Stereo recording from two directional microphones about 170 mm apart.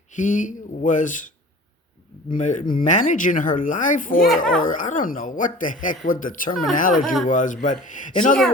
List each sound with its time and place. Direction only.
0.1 s speech: 50° left (ahead or behind)
2.3 s speech: 45° left (ahead or behind)